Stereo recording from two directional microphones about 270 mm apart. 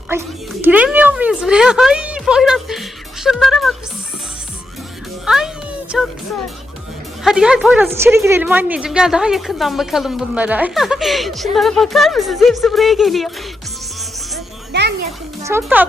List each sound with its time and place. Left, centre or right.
0.1 s a sound: centre
5.2 s music: centre
7.3 s a woman's voice: centre
14.7 s music: right
15.4 s speech: centre